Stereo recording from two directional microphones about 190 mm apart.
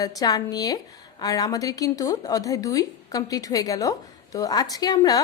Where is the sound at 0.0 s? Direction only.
20° left (ahead or behind).